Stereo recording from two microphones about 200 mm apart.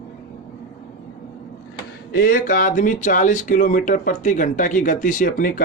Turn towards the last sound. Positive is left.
turn(degrees=40)  # may be behind; listen again after turning